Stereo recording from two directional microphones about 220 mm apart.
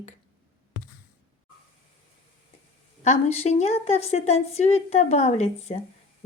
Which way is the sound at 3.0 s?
30° left (ahead or behind).